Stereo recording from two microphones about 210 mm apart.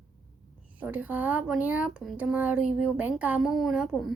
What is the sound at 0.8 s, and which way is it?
Speech, 5° right (ahead or behind).